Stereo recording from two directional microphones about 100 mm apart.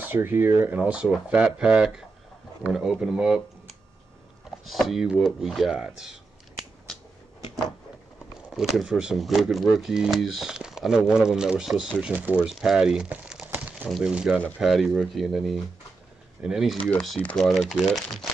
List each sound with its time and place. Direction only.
0.0 s speech: 20° right (ahead or behind)
8.5 s speech: 5° right (ahead or behind)
12.0 s speech: 15° right (ahead or behind)
12.4 s speech: 5° right (ahead or behind)
13.5 s crumpling: 20° right (ahead or behind)
13.8 s speech: centre (ahead or behind)